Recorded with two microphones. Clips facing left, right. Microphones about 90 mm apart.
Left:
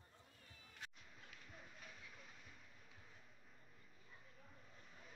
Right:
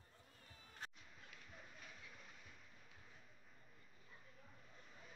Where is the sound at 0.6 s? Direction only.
40° right (ahead or behind).